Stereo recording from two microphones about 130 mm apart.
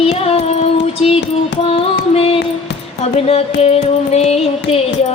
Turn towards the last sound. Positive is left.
turn(degrees=55)  # may be behind; listen again after turning